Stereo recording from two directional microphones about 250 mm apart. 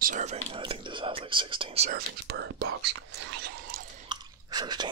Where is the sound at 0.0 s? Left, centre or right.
Right.